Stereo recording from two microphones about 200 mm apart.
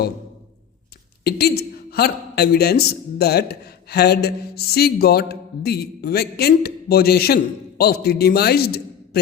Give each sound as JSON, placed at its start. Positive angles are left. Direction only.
{"t": 1.2, "sound": "a man's voice", "side_deg": 50}